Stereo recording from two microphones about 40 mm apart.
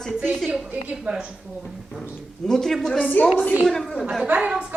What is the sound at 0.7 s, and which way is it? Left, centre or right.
Speech, right.